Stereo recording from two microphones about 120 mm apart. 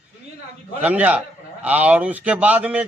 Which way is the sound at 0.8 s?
10° right (ahead or behind).